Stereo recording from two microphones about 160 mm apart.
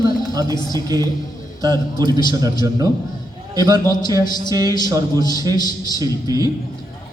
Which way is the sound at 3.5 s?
20° right (ahead or behind).